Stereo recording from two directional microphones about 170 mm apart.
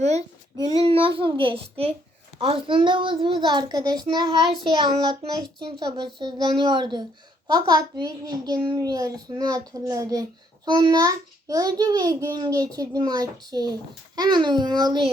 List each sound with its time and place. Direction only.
0.0 s a child's voice: 40° right (ahead or behind)